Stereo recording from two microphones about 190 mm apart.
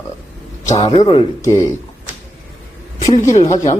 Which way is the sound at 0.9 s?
25° left (ahead or behind).